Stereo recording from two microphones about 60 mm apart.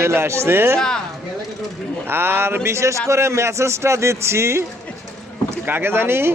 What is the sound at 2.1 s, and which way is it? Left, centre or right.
Speech, right.